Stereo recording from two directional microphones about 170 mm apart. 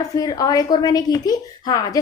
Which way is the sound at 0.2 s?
20° left (ahead or behind).